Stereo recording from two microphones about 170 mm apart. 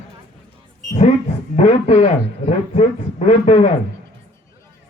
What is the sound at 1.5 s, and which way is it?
A man's voice, 40° left (ahead or behind).